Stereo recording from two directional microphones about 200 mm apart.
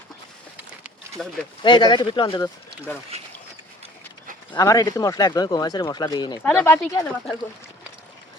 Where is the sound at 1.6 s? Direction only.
25° left (ahead or behind).